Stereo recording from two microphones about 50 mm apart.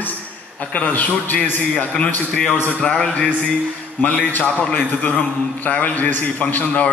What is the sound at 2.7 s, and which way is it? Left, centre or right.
Speech, left.